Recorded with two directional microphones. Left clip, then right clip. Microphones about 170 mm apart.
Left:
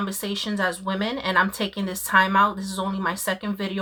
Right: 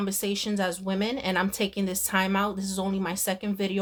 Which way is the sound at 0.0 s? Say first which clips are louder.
Left 1 dB; 40° right (ahead or behind).